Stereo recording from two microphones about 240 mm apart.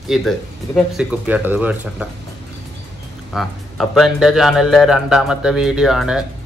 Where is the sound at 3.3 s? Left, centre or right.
Centre.